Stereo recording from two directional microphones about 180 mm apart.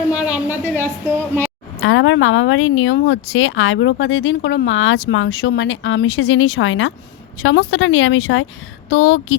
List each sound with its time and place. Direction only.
0.1 s a woman's voice: 10° right (ahead or behind)
1.8 s speech: 90° left